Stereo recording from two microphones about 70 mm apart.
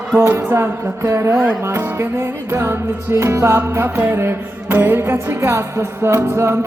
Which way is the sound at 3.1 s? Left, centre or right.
Right.